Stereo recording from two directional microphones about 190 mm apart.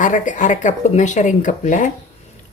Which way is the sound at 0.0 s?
40° left (ahead or behind).